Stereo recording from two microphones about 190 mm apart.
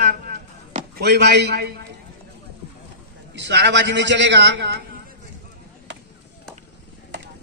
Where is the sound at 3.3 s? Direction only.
65° right (ahead or behind).